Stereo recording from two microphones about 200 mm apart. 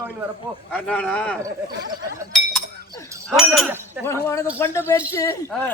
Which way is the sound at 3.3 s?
Centre (ahead or behind).